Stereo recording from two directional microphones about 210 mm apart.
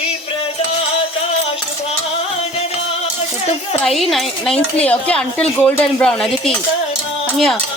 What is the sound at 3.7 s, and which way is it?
Speech, centre (ahead or behind).